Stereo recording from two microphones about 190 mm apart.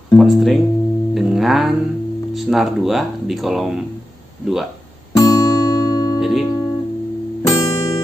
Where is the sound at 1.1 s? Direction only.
Centre (ahead or behind).